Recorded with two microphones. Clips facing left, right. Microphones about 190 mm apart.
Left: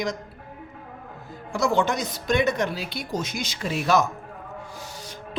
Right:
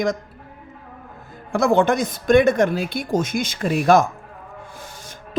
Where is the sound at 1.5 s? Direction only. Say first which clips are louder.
Right 6 dB; 55° right (ahead or behind).